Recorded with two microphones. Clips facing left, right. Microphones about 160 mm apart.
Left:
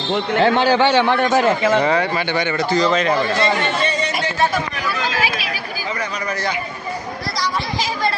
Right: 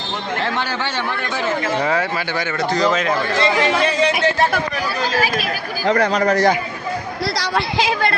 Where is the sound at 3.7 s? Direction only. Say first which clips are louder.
Right 4 dB; 65° right (ahead or behind).